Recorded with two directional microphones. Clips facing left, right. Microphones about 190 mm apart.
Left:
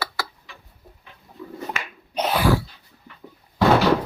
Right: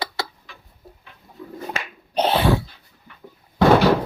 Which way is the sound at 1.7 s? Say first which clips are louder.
Right 1 dB; 30° right (ahead or behind).